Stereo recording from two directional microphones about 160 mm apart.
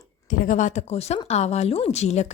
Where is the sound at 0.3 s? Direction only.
50° left (ahead or behind).